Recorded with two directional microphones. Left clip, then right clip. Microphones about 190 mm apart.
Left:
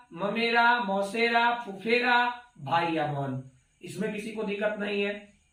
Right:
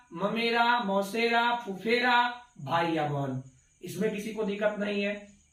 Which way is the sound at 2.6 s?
25° right (ahead or behind).